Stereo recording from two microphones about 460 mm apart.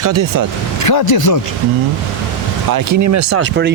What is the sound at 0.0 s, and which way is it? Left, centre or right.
Speech, right.